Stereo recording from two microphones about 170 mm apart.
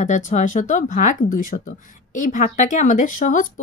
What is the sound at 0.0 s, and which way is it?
Speech, 45° left (ahead or behind).